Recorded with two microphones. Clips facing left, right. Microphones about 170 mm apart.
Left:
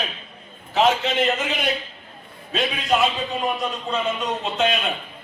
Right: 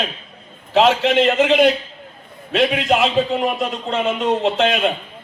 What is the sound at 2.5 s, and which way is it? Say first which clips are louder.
A man's voice: right 5 dB; 90° right.